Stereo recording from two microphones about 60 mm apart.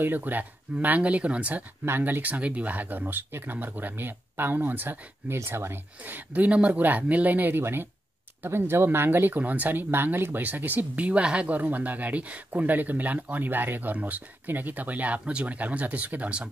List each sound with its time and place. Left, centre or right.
0.0 s speech: right
1.9 s speech: right